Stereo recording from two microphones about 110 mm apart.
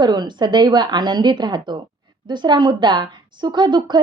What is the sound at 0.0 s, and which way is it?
A woman's voice, 40° right (ahead or behind).